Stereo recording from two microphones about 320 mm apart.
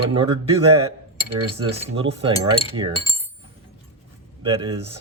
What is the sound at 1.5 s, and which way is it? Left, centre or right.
Speech, centre.